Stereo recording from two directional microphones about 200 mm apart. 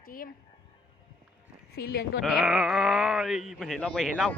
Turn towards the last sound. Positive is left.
turn(degrees=5)  # may be behind; listen again after turning